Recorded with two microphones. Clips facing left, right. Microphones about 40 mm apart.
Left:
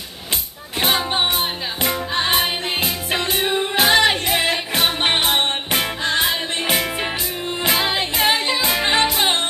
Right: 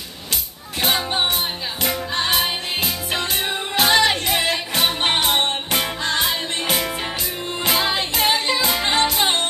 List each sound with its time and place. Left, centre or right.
0.7 s music: centre